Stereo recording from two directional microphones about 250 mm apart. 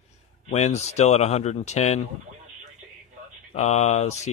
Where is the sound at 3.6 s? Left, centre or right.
Left.